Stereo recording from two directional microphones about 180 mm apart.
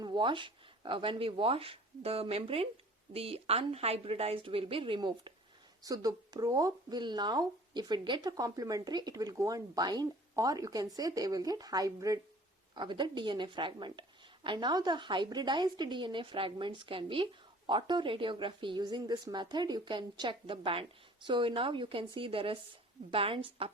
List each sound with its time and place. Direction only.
0.0 s a woman's voice: 25° right (ahead or behind)